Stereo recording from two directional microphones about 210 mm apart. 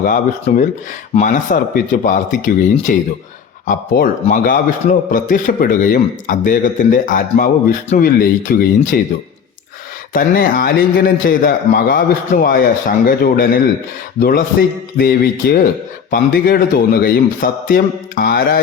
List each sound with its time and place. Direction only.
0.0 s a man's voice: 40° left (ahead or behind)
10.1 s speech: 45° left (ahead or behind)